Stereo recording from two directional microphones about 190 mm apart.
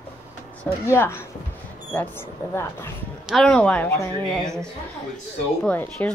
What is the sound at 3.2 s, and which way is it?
Speech, centre (ahead or behind).